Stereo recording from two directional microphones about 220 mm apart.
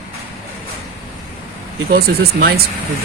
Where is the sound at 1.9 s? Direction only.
45° right (ahead or behind).